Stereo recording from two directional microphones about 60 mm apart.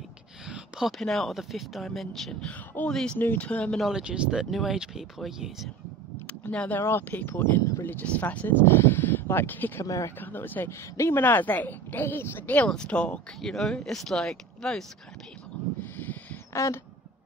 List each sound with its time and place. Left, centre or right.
0.8 s speech: centre
2.4 s speech: left
2.9 s speech: centre
3.3 s speech: left
3.9 s speech: centre
6.2 s a sound: centre
6.8 s speech: left
7.1 s speech: left
9.8 s speech: left
10.2 s speech: left
12.6 s speech: centre
13.4 s speech: centre
15.8 s owl: left